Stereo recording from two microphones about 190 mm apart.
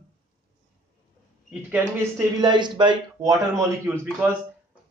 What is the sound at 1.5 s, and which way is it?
Speech, 5° right (ahead or behind).